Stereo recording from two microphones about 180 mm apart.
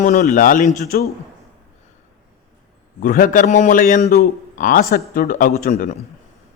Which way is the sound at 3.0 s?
50° left (ahead or behind).